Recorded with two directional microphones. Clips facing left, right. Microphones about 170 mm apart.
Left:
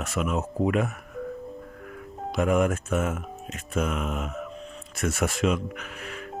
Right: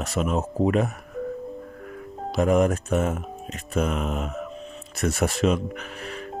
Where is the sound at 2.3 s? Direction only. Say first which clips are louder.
Right 3 dB; 35° right (ahead or behind).